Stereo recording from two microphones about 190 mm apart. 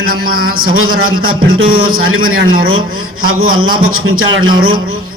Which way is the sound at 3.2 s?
90° right.